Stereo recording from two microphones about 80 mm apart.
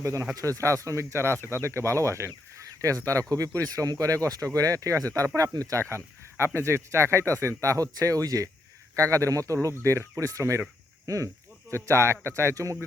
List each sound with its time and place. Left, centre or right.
0.0 s speech: right